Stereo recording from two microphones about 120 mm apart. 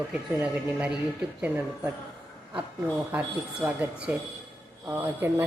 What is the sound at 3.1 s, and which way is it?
Speech, 10° right (ahead or behind).